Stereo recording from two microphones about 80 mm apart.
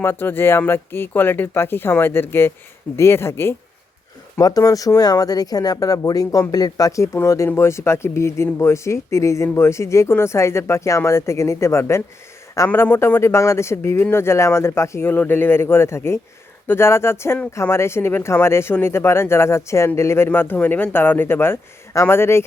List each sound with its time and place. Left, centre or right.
0.0 s speech: left
4.4 s speech: left
12.6 s speech: left